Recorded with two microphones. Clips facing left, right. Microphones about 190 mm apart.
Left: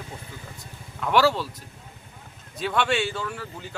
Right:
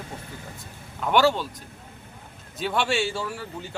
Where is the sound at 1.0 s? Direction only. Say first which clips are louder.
Even; centre (ahead or behind).